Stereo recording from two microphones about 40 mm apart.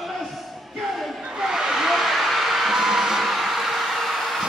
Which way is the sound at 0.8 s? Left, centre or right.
Centre.